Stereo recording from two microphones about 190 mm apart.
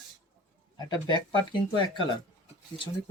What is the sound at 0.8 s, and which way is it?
Speech, 25° left (ahead or behind).